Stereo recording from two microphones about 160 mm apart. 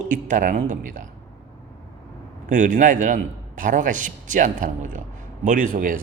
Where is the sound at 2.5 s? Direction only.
50° right (ahead or behind).